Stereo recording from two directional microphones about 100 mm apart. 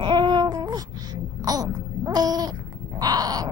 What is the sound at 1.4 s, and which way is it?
Babbling, 40° right (ahead or behind).